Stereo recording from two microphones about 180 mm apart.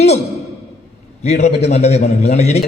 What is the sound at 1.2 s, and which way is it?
A man's voice, 35° left (ahead or behind).